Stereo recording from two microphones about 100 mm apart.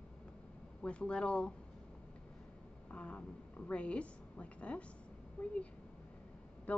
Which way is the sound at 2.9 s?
15° left (ahead or behind).